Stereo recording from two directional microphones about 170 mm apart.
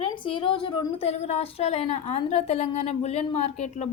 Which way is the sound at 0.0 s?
30° left (ahead or behind).